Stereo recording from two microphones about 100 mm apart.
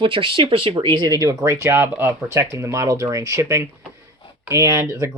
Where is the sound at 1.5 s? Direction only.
25° right (ahead or behind).